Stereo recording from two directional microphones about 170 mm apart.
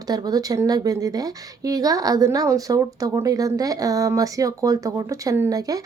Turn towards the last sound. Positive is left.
turn(degrees=-20)  # may be behind; listen again after turning